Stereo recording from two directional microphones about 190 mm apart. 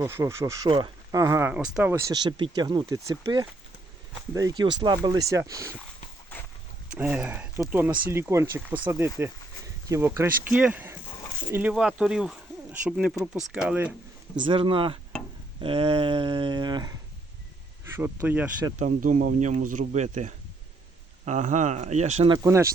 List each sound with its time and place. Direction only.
0.0 s speech: 15° right (ahead or behind)
1.9 s speech: 15° right (ahead or behind)
6.9 s speech: 5° right (ahead or behind)
14.4 s speech: 25° right (ahead or behind)
17.9 s speech: 10° right (ahead or behind)
18.8 s speech: 45° right (ahead or behind)
22.3 s speech: 15° right (ahead or behind)